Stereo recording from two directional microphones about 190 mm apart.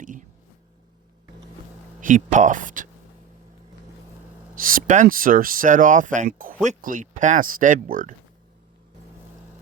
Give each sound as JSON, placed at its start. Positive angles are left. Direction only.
{"t": 0.0, "sound": "a sound", "side_deg": -45}
{"t": 2.0, "sound": "speech", "side_deg": -45}
{"t": 4.5, "sound": "speech", "side_deg": -45}